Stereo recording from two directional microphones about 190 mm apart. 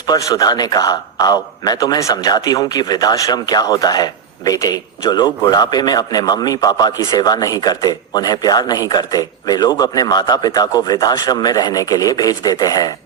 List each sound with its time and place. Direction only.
0.1 s a man's voice: 20° left (ahead or behind)